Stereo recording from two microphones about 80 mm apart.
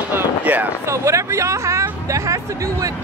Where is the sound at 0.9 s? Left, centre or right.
Right.